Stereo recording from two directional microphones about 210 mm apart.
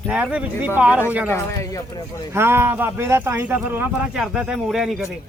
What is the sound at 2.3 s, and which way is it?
A man's voice, 10° right (ahead or behind).